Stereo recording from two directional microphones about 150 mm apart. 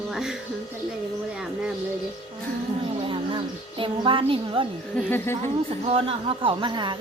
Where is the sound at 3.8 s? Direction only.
35° right (ahead or behind).